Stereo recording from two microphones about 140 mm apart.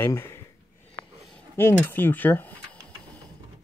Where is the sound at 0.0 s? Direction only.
15° left (ahead or behind).